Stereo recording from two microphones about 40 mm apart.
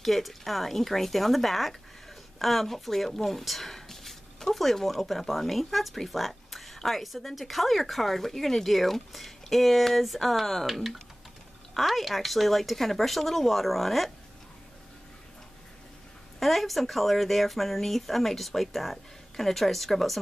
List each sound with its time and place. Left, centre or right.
0.0 s speech: centre
16.3 s speech: centre